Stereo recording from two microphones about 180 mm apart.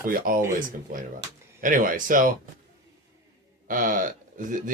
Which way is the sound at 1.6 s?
50° right (ahead or behind).